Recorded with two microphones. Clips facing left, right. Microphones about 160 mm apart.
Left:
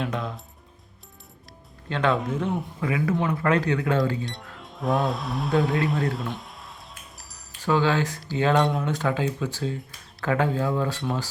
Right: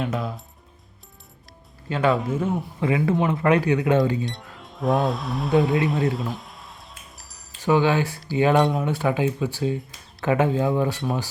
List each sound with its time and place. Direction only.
0.0 s speech: 5° right (ahead or behind)
1.9 s speech: 5° right (ahead or behind)
2.8 s speech: 25° right (ahead or behind)
4.3 s speech: centre (ahead or behind)
7.2 s a sound: centre (ahead or behind)
7.6 s speech: 15° right (ahead or behind)